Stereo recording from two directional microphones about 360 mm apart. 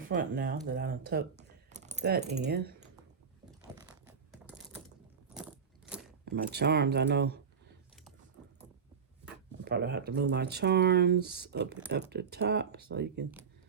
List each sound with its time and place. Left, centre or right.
0.1 s speech: right
3.8 s a sound: centre
5.3 s keys jangling: centre
6.2 s speech: right
9.6 s speech: right